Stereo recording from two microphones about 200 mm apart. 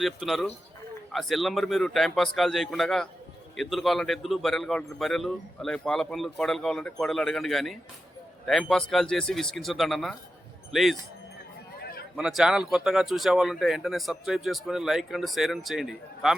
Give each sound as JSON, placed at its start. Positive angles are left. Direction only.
{"t": 0.0, "sound": "a man's voice", "side_deg": 0}
{"t": 11.8, "sound": "a sound", "side_deg": 50}
{"t": 12.1, "sound": "a man's voice", "side_deg": -5}